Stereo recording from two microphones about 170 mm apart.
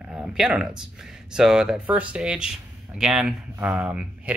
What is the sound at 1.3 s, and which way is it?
Speech, 5° right (ahead or behind).